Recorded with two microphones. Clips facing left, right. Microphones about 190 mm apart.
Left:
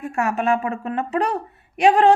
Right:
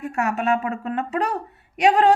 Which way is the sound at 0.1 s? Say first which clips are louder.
Left 2 dB; 30° left (ahead or behind).